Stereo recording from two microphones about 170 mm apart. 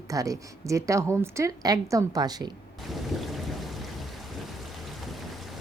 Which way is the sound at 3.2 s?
Centre (ahead or behind).